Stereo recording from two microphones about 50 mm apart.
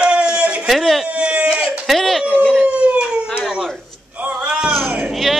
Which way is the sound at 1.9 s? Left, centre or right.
Centre.